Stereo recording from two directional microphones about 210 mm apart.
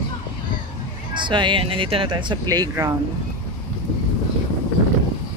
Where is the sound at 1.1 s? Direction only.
20° right (ahead or behind).